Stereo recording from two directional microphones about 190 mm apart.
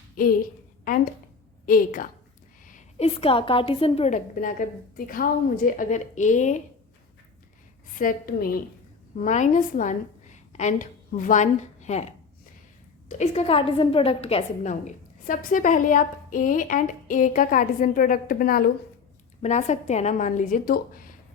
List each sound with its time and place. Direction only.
0.2 s a woman's voice: 50° left (ahead or behind)
1.6 s a woman's voice: 45° left (ahead or behind)
7.9 s a woman's voice: 50° left (ahead or behind)
13.1 s a woman's voice: 35° left (ahead or behind)
19.4 s a woman's voice: 35° left (ahead or behind)